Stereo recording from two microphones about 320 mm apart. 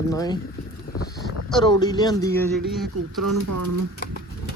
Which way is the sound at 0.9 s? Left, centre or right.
Left.